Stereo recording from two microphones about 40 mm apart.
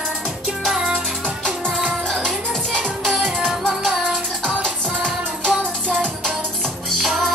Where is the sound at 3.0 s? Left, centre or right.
Centre.